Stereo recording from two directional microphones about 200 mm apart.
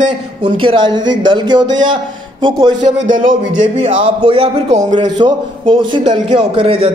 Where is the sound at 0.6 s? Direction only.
25° right (ahead or behind).